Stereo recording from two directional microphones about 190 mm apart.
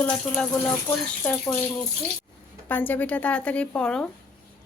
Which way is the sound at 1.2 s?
10° left (ahead or behind).